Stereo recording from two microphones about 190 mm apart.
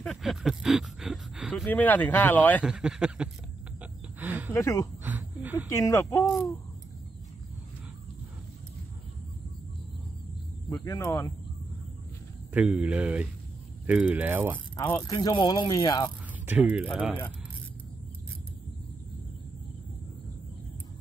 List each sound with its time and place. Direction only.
0.0 s speech: centre (ahead or behind)
2.6 s speech: 5° right (ahead or behind)
3.8 s a sound: 10° right (ahead or behind)
4.6 s speech: 15° left (ahead or behind)
5.0 s a sound: 10° right (ahead or behind)
5.7 s speech: 15° left (ahead or behind)
6.3 s speech: centre (ahead or behind)
10.7 s speech: 20° left (ahead or behind)
12.5 s speech: 5° right (ahead or behind)
15.0 s speech: 20° left (ahead or behind)
16.4 s speech: 10° right (ahead or behind)